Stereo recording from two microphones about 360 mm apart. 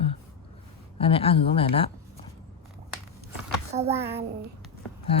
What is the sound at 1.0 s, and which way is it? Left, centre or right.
Speech, centre.